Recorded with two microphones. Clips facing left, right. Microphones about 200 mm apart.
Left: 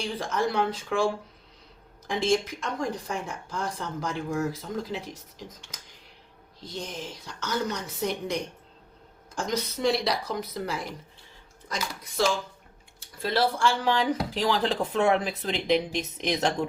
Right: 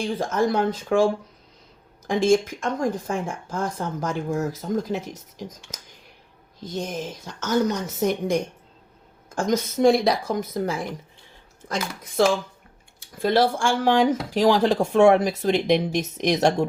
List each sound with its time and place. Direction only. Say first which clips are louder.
0.0 s a woman's voice: right 5 dB; 45° right (ahead or behind)
2.0 s a woman's voice: right 6 dB; 50° right (ahead or behind)